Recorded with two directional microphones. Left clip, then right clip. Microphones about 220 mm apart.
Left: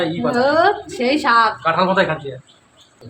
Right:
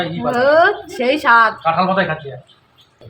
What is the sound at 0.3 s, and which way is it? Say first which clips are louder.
A woman's voice: right 3 dB; 10° right (ahead or behind).